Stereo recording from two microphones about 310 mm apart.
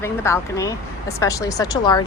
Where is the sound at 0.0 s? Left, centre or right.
Centre.